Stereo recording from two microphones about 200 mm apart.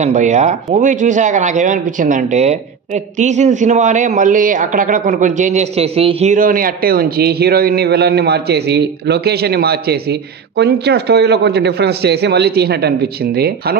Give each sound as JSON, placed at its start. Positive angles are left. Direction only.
{"t": 0.0, "sound": "speech", "side_deg": -35}